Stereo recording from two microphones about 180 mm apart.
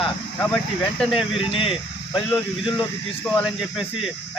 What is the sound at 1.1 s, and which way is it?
Speech, 30° left (ahead or behind).